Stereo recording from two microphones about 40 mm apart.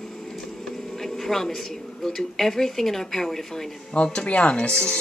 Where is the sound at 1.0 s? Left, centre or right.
Centre.